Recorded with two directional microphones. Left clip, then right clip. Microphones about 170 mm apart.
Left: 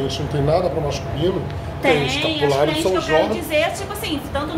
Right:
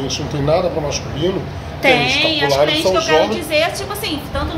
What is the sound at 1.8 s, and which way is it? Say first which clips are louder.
Speech: right 5 dB; 45° right (ahead or behind).